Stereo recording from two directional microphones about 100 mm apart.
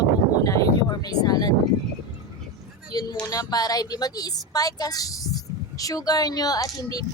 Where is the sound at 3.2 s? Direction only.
40° left (ahead or behind).